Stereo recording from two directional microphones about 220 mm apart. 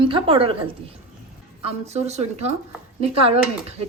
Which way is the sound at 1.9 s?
30° right (ahead or behind).